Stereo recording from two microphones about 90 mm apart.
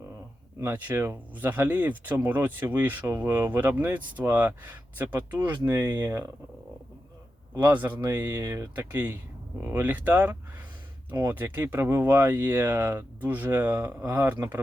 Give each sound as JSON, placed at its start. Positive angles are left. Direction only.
{"t": 0.7, "sound": "speech", "side_deg": -20}
{"t": 7.6, "sound": "speech", "side_deg": -20}